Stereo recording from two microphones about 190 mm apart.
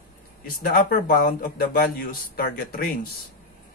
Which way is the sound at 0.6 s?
50° left (ahead or behind).